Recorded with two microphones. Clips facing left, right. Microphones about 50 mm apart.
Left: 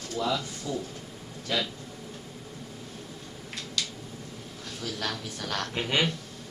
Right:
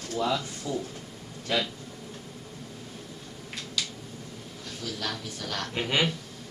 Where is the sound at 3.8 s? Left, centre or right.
Centre.